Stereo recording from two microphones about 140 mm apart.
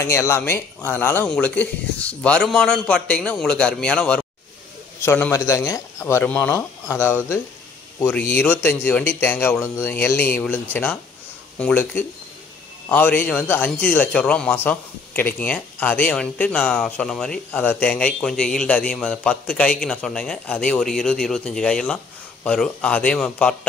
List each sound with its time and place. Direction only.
0.0 s a man's voice: 20° left (ahead or behind)
8.4 s a man's voice: 15° left (ahead or behind)